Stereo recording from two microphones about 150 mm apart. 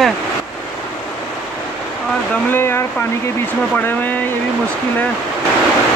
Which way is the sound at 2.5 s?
15° left (ahead or behind).